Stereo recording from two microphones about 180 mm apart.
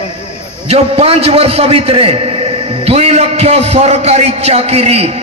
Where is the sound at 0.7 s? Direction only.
35° right (ahead or behind).